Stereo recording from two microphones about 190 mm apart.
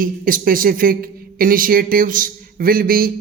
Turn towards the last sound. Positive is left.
turn(degrees=-50)  # may be behind; listen again after turning